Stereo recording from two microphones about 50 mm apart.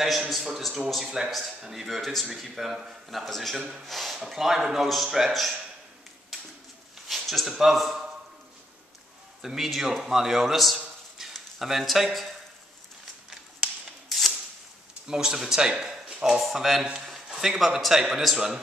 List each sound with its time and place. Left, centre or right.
0.0 s a man's voice: centre
3.8 s a sound: centre
4.2 s a man's voice: centre
6.3 s a sound: centre
7.1 s speech: centre
9.4 s a man's voice: centre
13.6 s a sound: centre
15.0 s speech: centre
16.8 s a man's voice: centre
17.1 s a man's voice: centre